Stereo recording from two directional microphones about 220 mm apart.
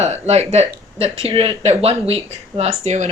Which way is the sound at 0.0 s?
30° right (ahead or behind).